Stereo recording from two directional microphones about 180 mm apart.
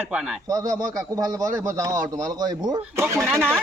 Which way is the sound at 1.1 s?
20° right (ahead or behind).